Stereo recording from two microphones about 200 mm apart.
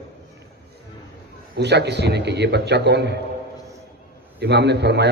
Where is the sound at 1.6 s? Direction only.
60° right (ahead or behind).